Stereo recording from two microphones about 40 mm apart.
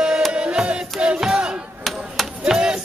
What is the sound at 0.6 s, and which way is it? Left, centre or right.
Battle cry, right.